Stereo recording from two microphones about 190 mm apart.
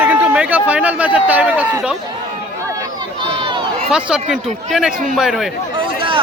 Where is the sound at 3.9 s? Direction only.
5° right (ahead or behind).